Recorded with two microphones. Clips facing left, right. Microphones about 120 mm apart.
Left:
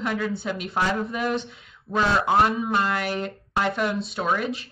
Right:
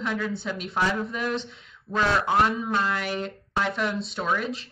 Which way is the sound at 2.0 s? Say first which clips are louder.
Left 2 dB; 25° left (ahead or behind).